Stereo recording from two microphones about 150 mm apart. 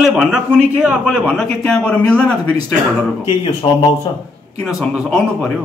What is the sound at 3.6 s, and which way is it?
Speech, 40° left (ahead or behind).